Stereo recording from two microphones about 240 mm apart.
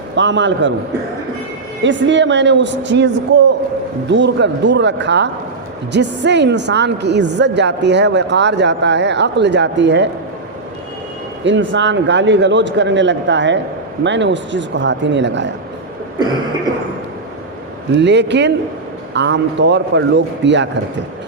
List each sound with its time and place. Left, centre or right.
0.2 s a woman's voice: right
1.8 s a woman's voice: right
4.1 s a woman's voice: right
11.4 s a woman's voice: right
17.9 s a woman's voice: right